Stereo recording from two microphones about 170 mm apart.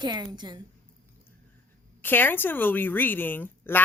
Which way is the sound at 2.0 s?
10° left (ahead or behind).